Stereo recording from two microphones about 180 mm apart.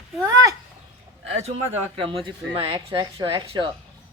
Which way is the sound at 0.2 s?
15° right (ahead or behind).